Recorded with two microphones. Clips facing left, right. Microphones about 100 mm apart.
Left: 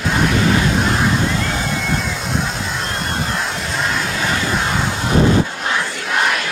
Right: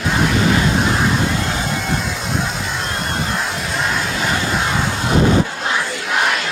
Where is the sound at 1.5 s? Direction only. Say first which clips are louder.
Even; centre (ahead or behind).